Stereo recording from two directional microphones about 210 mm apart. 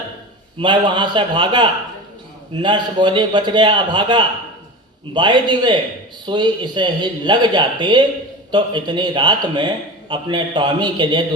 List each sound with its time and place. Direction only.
0.6 s a man's voice: 25° right (ahead or behind)